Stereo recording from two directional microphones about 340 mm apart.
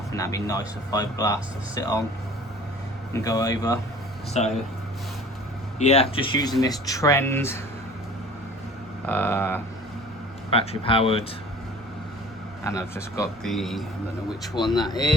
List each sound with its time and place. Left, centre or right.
0.1 s speech: centre
3.1 s speech: centre
5.8 s speech: centre
9.0 s speech: centre
10.5 s speech: centre
12.6 s speech: centre
14.5 s speech: centre